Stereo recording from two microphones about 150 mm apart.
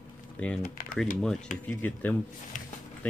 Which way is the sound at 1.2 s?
5° left (ahead or behind).